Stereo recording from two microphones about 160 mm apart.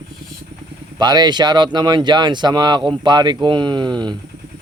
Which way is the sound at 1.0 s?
25° right (ahead or behind).